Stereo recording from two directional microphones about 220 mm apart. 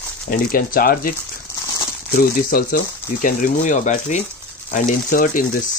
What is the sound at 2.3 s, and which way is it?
Speech, 40° left (ahead or behind).